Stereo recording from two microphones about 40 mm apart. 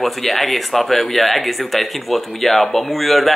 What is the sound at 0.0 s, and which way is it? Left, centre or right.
Speech, centre.